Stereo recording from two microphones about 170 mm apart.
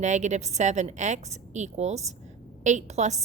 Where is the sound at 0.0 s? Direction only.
45° right (ahead or behind).